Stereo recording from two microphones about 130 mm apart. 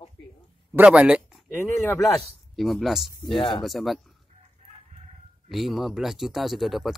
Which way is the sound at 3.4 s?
40° left (ahead or behind).